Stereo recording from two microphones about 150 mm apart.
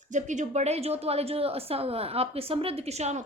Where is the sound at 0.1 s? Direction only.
55° right (ahead or behind).